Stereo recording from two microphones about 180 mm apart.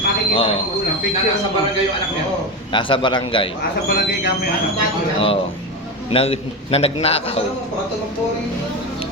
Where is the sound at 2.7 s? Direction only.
25° left (ahead or behind).